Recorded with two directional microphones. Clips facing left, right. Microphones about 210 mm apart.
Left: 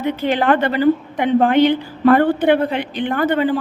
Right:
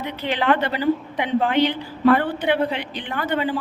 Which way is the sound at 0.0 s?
50° left (ahead or behind).